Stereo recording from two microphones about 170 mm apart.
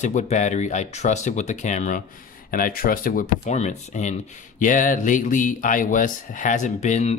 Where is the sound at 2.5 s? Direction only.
55° left (ahead or behind).